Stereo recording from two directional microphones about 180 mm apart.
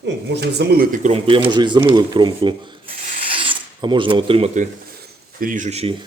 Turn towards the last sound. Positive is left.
turn(degrees=-35)  # may be behind; listen again after turning